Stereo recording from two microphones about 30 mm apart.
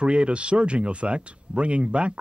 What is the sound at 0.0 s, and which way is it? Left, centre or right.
Speech, right.